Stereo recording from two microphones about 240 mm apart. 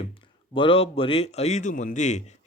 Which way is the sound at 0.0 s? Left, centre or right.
Left.